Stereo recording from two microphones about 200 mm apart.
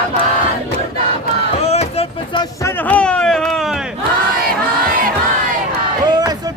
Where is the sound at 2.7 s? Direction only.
10° left (ahead or behind).